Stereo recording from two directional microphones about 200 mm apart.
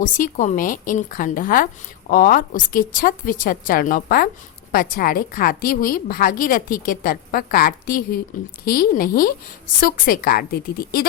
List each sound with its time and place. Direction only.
0.0 s a woman's voice: 40° left (ahead or behind)